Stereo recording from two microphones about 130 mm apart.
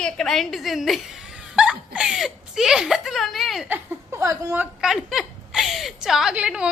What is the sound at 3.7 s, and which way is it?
A woman's voice, 20° right (ahead or behind).